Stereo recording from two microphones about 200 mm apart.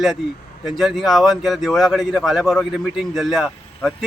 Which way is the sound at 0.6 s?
Centre (ahead or behind).